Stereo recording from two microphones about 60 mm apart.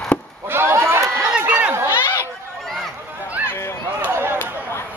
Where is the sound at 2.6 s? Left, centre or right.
Centre.